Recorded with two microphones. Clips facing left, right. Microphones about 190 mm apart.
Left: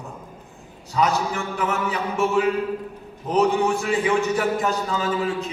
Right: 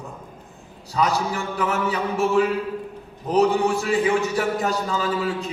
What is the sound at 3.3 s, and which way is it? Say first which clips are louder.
A man's voice: right 1 dB; 35° right (ahead or behind).